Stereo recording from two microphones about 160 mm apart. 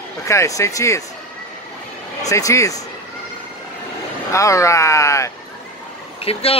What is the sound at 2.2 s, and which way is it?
Speech, 20° left (ahead or behind).